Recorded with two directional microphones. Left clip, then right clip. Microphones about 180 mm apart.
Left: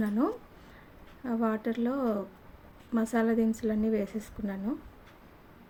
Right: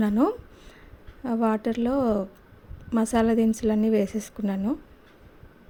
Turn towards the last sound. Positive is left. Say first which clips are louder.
# right 7 dB
turn(degrees=-45)  # may be behind; listen again after turning